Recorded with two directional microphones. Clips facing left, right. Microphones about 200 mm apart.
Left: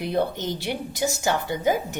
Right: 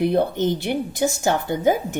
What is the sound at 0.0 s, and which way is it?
A woman's voice, 55° right (ahead or behind).